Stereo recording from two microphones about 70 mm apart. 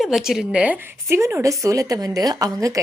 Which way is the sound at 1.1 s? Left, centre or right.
Right.